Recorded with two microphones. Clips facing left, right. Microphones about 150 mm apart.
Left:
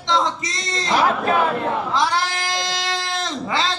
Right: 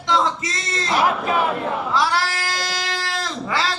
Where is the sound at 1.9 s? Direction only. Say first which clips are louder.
Even; 20° left (ahead or behind).